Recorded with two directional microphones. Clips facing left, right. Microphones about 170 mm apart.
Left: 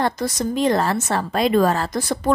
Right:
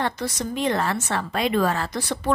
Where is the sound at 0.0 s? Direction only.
40° left (ahead or behind).